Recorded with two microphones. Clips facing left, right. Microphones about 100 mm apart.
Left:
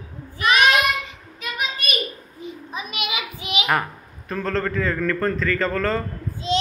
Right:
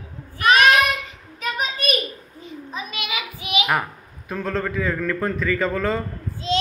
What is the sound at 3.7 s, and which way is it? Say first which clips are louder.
A man's voice: left 1 dB; 5° right (ahead or behind).